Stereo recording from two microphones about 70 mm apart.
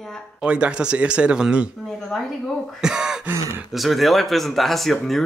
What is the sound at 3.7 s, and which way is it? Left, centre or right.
Speech, centre.